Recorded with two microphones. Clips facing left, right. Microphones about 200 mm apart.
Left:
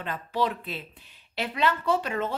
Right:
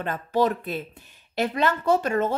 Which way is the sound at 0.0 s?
45° right (ahead or behind).